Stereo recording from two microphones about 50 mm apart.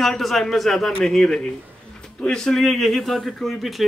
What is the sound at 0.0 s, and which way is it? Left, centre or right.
A man's voice, centre.